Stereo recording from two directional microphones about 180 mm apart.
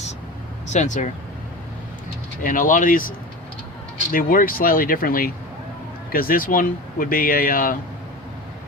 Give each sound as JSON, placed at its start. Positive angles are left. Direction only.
{"t": 0.7, "sound": "speech", "side_deg": 40}
{"t": 2.4, "sound": "speech", "side_deg": 50}
{"t": 4.1, "sound": "speech", "side_deg": 50}